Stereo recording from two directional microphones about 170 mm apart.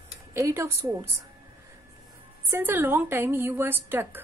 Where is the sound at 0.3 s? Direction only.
15° right (ahead or behind).